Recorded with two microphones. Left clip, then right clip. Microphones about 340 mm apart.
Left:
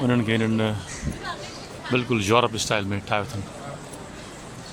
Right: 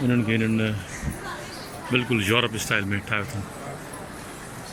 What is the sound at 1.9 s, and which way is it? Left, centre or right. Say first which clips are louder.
Speech: left 2 dB; centre.